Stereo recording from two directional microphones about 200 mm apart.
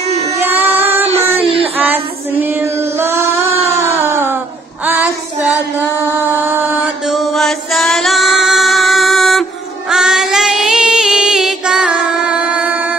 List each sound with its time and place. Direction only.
0.4 s child singing: 10° right (ahead or behind)
1.4 s music: 30° right (ahead or behind)
1.8 s female singing: 10° right (ahead or behind)
3.5 s a sound: 30° right (ahead or behind)
3.9 s a sound: 10° right (ahead or behind)
6.4 s chant: 10° right (ahead or behind)